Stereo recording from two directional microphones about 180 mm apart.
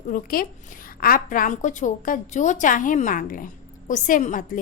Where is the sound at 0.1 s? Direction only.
50° left (ahead or behind).